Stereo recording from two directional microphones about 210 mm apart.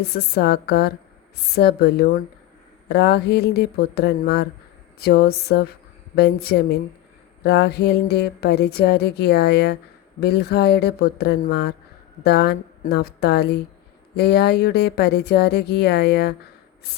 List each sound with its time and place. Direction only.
0.0 s speech: 50° left (ahead or behind)